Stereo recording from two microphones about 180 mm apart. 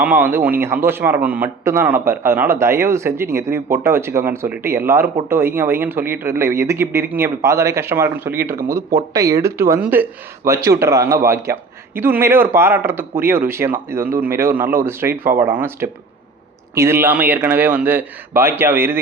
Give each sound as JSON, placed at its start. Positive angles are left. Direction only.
{"t": 0.0, "sound": "a man's voice", "side_deg": -10}